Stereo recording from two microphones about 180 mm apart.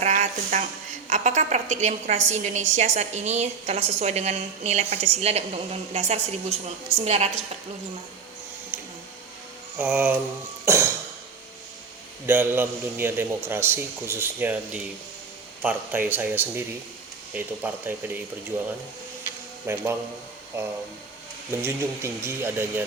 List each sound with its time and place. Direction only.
0.0 s a sound: 40° right (ahead or behind)
1.1 s a woman's voice: 40° right (ahead or behind)
8.7 s printer: 10° right (ahead or behind)
9.7 s a man's voice: 10° right (ahead or behind)
12.2 s a man's voice: 10° right (ahead or behind)
19.6 s a man's voice: 15° right (ahead or behind)